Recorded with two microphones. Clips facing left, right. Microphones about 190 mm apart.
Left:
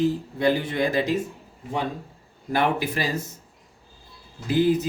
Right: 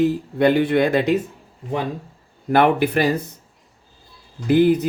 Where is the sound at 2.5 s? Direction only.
65° right (ahead or behind).